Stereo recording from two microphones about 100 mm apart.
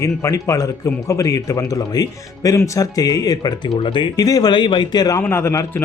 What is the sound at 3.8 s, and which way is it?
Speech, 60° left (ahead or behind).